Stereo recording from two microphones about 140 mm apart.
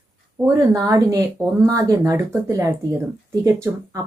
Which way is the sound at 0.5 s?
25° right (ahead or behind).